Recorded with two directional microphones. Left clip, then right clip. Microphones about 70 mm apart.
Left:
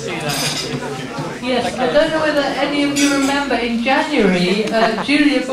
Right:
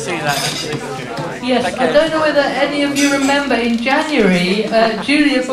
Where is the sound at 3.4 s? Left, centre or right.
Right.